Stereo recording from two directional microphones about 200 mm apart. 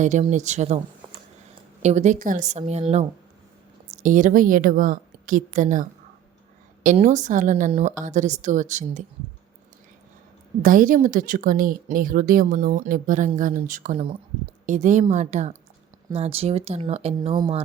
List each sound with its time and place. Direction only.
0.0 s a woman's voice: 35° right (ahead or behind)
1.8 s a woman's voice: 35° right (ahead or behind)
10.6 s a woman's voice: 40° right (ahead or behind); by 17.6 s 25° right (ahead or behind)